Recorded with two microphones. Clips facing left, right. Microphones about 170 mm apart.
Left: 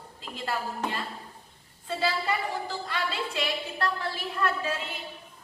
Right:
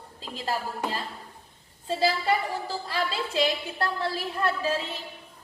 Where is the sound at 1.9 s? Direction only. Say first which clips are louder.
Right 4 dB; 30° right (ahead or behind).